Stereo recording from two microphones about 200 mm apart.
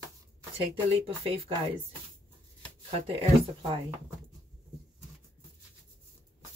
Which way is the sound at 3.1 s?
30° right (ahead or behind).